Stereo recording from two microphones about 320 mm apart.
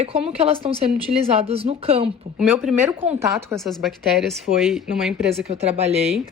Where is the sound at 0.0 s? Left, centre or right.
Centre.